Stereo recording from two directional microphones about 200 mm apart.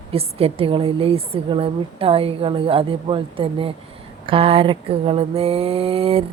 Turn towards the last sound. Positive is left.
turn(degrees=-30)  # may be behind; listen again after turning